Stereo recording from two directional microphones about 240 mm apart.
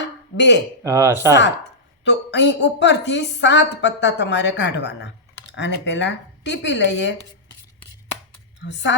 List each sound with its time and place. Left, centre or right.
0.0 s a sound: left
0.9 s speech: centre
2.0 s a woman's voice: left
8.6 s a woman's voice: left